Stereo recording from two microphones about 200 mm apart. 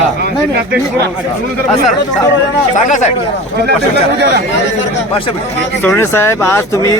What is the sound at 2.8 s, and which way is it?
Speech, 35° left (ahead or behind).